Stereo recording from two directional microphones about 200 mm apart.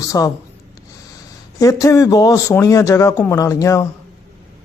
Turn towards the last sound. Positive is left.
turn(degrees=15)  # may be behind; listen again after turning